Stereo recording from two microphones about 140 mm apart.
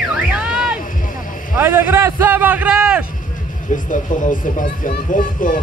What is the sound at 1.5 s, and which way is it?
A man's voice, 15° right (ahead or behind).